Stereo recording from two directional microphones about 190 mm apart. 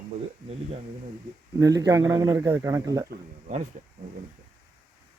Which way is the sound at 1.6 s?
20° right (ahead or behind).